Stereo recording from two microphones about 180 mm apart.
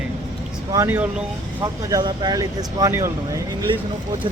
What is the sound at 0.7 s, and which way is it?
Speech, 15° right (ahead or behind).